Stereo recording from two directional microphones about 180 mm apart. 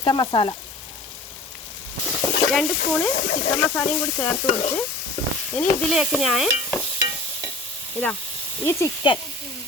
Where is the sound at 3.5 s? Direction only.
15° left (ahead or behind).